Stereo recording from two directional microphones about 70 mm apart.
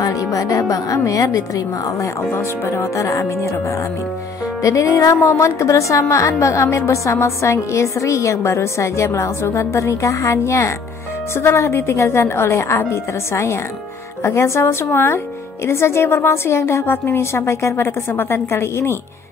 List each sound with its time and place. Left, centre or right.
0.0 s speech: left
2.3 s a woman's voice: left
4.6 s a woman's voice: left